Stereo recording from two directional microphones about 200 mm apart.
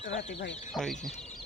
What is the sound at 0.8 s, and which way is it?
Speech, centre (ahead or behind).